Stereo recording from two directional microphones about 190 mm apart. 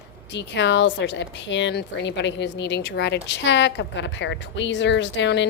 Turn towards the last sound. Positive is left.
turn(degrees=70)  # may be behind; listen again after turning